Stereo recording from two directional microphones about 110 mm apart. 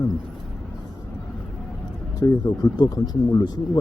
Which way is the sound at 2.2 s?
35° left (ahead or behind).